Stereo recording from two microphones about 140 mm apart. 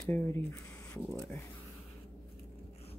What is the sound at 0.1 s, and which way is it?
Speech, 15° left (ahead or behind).